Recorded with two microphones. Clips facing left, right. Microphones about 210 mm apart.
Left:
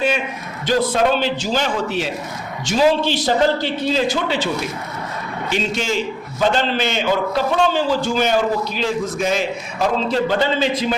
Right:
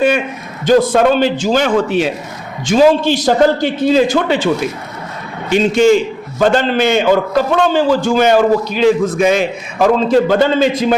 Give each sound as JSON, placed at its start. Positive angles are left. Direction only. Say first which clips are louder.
{"t": 0.6, "sound": "a man's voice", "louder": "right 7 dB", "side_deg": -50}
{"t": 5.7, "sound": "a man's voice", "louder": "right 12 dB", "side_deg": -50}